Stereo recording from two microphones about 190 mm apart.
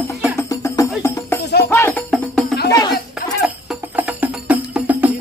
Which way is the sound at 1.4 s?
60° left (ahead or behind).